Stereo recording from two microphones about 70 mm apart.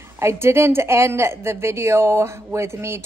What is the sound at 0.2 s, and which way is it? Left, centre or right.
A woman's voice, right.